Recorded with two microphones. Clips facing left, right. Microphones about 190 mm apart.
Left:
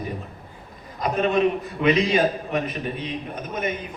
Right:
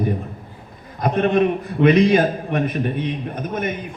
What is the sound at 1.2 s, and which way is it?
A man's voice, 55° right (ahead or behind).